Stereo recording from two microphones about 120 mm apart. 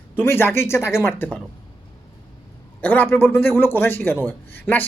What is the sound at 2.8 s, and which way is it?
A woman's voice, 15° left (ahead or behind).